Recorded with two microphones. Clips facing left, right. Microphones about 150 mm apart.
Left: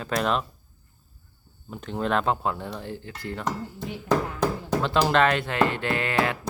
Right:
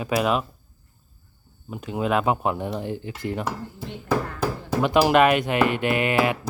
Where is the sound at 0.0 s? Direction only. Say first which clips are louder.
Right 3 dB; 5° right (ahead or behind).